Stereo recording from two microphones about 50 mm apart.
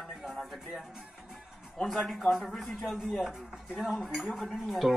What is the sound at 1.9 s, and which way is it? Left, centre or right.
A man's voice, centre.